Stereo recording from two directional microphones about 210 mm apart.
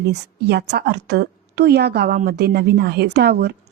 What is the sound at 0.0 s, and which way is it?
A woman's voice, 50° right (ahead or behind).